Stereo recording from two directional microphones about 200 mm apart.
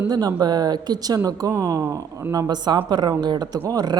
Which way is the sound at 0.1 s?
20° right (ahead or behind).